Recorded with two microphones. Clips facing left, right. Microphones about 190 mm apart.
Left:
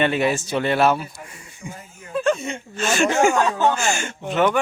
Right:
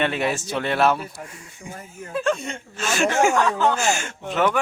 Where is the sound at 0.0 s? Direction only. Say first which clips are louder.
Left 3 dB; centre (ahead or behind).